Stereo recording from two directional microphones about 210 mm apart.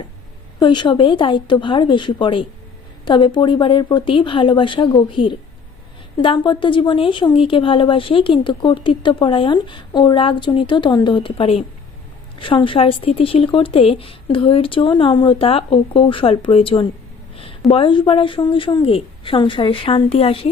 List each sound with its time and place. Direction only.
0.6 s speech: 20° left (ahead or behind)